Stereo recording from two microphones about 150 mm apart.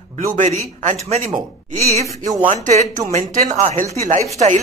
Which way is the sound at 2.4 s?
55° right (ahead or behind).